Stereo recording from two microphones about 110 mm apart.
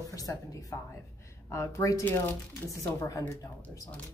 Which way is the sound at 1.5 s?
30° left (ahead or behind).